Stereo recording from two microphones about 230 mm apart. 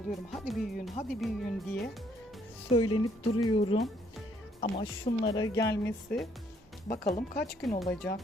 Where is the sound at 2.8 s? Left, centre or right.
Left.